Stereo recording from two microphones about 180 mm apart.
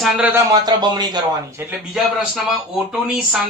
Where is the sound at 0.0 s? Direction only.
10° right (ahead or behind).